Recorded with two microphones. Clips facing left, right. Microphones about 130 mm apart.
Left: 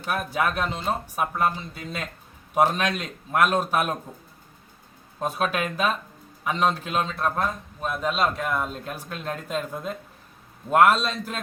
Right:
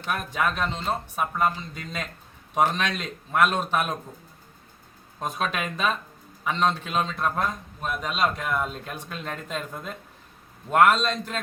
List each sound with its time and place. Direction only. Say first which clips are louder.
0.0 s a man's voice: left 1 dB; 5° left (ahead or behind)
3.3 s speech: left 1 dB; 10° left (ahead or behind)
5.2 s a man's voice: left 3 dB; 5° left (ahead or behind)